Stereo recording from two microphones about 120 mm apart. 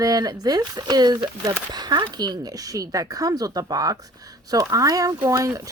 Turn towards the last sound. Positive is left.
turn(degrees=-25)  # may be behind; listen again after turning